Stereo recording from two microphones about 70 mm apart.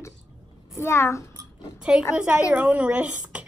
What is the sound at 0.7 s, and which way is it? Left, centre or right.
Speech, left.